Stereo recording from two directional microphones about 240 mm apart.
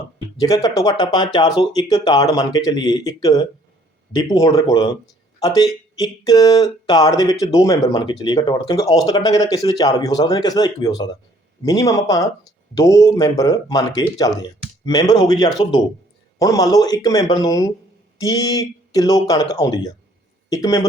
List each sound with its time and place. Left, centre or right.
0.3 s speech: centre